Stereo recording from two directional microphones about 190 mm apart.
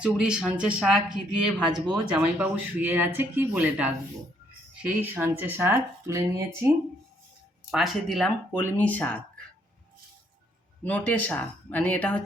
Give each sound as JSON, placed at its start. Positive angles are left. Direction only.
{"t": 0.0, "sound": "speech", "side_deg": -5}
{"t": 7.7, "sound": "speech", "side_deg": 0}
{"t": 10.8, "sound": "speech", "side_deg": 10}